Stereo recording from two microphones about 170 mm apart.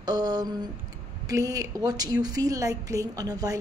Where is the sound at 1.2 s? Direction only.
20° right (ahead or behind).